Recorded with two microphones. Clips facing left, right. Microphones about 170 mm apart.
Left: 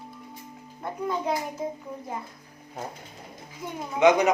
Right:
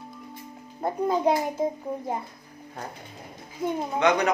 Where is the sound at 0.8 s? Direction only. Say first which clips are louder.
Right 6 dB; 35° right (ahead or behind).